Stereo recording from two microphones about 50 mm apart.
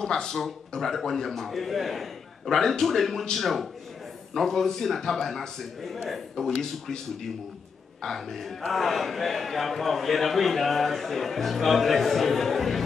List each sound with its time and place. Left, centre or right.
0.0 s a man's voice: centre
8.0 s a man's voice: centre